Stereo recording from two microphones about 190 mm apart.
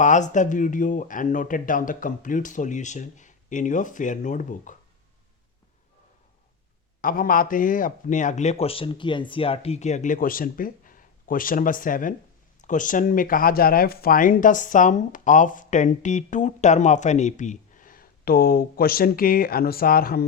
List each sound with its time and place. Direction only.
0.0 s speech: 40° left (ahead or behind)
7.0 s speech: 45° left (ahead or behind)